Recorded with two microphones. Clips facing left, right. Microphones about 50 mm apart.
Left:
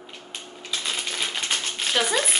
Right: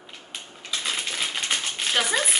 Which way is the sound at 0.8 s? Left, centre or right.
Centre.